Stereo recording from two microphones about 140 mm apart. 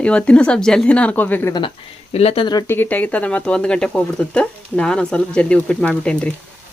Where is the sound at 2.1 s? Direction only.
45° left (ahead or behind).